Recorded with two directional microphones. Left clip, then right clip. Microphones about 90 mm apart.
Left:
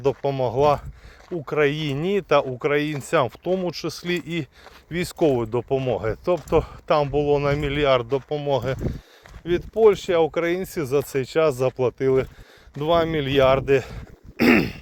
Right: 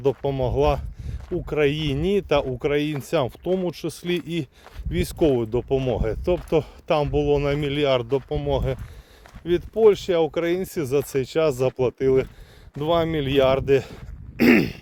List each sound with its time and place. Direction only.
0.0 s speech: 30° right (ahead or behind)
14.3 s dog: 45° right (ahead or behind)